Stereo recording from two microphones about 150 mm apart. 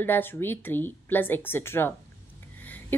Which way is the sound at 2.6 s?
10° left (ahead or behind).